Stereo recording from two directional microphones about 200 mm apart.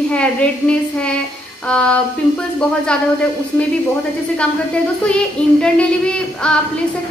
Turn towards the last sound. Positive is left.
turn(degrees=5)  # may be behind; listen again after turning